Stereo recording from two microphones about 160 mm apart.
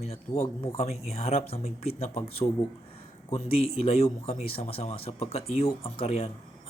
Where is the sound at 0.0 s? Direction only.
40° left (ahead or behind).